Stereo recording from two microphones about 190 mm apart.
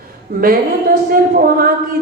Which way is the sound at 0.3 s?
50° right (ahead or behind).